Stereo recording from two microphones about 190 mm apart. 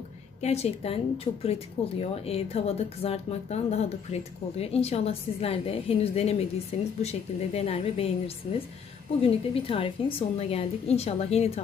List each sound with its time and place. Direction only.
0.4 s speech: 35° left (ahead or behind)
9.2 s speech: 30° left (ahead or behind)